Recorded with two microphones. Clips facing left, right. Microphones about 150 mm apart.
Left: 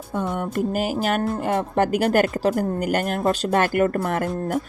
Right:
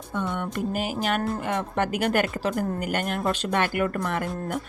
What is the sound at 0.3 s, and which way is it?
A woman's voice, 40° left (ahead or behind).